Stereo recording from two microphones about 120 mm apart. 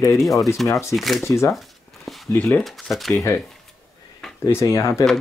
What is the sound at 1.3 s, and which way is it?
Speech, 25° left (ahead or behind).